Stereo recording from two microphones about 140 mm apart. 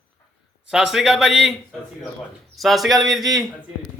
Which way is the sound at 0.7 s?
5° right (ahead or behind).